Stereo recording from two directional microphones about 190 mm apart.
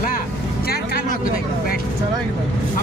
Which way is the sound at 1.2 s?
50° left (ahead or behind).